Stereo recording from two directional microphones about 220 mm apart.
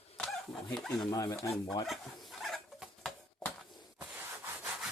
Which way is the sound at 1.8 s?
Centre (ahead or behind).